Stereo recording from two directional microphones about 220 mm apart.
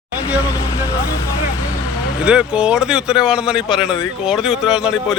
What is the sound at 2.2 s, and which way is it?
Speech, 5° right (ahead or behind).